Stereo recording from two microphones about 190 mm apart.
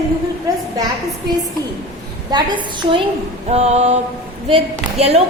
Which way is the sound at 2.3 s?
25° right (ahead or behind).